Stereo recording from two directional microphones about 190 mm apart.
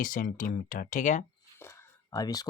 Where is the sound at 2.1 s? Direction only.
20° left (ahead or behind).